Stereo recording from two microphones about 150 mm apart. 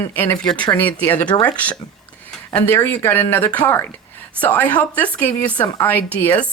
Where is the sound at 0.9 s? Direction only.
10° left (ahead or behind).